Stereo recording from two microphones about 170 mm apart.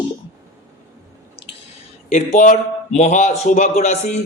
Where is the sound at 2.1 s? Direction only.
45° left (ahead or behind).